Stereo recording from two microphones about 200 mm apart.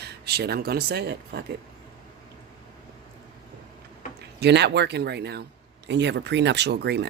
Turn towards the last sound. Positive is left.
turn(degrees=-55)  # may be behind; listen again after turning